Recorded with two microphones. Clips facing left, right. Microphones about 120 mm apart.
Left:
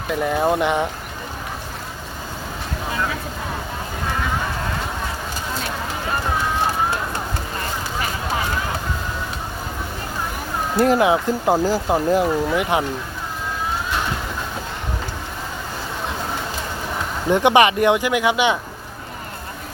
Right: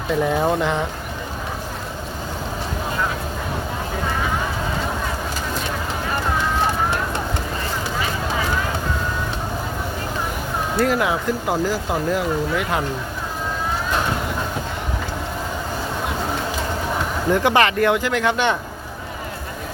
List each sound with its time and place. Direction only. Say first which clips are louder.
0.1 s speech: even; 5° left (ahead or behind)
10.8 s speech: left 4 dB; 25° left (ahead or behind)
17.2 s speech: left 3 dB; 20° left (ahead or behind)